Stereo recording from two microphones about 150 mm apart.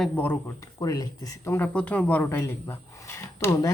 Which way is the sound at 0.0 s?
10° left (ahead or behind).